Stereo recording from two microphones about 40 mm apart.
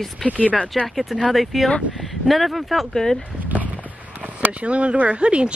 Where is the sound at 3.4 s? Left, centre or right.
Right.